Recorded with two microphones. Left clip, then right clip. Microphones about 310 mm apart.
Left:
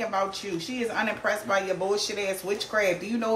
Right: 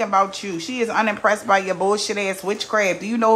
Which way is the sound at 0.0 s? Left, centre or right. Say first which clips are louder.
Right 9 dB; centre.